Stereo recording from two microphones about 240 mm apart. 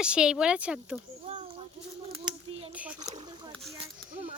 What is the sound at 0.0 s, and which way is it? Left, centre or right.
Speech, centre.